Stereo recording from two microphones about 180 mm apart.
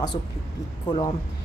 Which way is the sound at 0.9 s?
25° left (ahead or behind).